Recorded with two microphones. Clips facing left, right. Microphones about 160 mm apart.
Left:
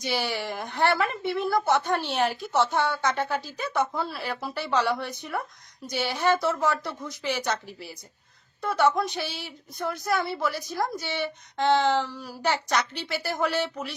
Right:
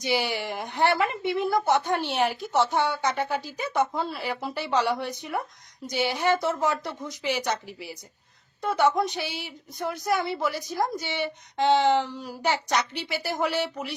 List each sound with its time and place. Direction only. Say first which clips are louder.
0.0 s a woman's voice: right 2 dB; 15° right (ahead or behind)